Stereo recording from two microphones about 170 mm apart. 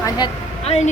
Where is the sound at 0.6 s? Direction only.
40° left (ahead or behind).